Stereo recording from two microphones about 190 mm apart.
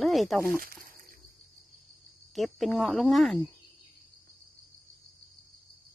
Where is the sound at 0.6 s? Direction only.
50° right (ahead or behind).